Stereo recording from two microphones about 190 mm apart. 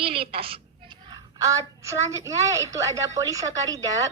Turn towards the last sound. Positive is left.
turn(degrees=-20)  # may be behind; listen again after turning